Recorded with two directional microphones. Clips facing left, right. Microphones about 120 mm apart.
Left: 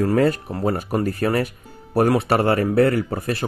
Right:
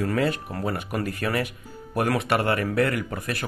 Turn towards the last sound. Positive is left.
turn(degrees=35)  # may be behind; listen again after turning